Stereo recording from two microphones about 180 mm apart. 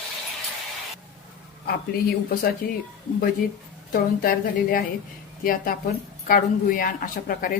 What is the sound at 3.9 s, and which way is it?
A woman's voice, 50° left (ahead or behind).